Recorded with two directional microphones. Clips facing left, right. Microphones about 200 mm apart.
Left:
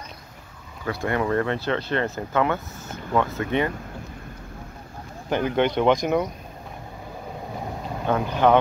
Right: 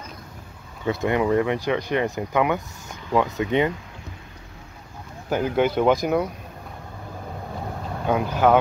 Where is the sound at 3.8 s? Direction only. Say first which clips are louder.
Left 4 dB; 50° left (ahead or behind).